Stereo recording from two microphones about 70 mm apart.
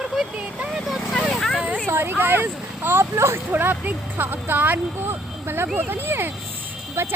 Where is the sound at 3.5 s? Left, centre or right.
Right.